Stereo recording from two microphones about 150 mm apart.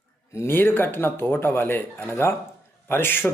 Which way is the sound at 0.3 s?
15° left (ahead or behind).